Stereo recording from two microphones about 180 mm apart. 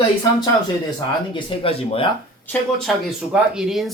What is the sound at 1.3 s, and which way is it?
Speech, 30° left (ahead or behind).